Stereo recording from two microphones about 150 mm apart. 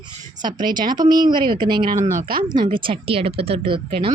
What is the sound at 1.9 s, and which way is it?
Speech, 75° right (ahead or behind).